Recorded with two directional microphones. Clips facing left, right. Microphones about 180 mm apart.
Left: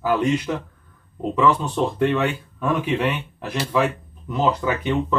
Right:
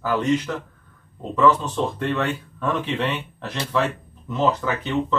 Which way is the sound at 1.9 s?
10° left (ahead or behind).